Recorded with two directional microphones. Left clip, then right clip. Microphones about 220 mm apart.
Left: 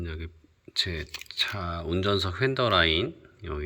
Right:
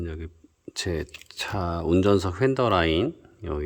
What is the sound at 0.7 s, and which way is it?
Speech, 25° right (ahead or behind).